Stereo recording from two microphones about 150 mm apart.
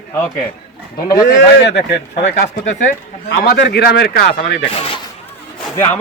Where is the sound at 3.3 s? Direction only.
90° left.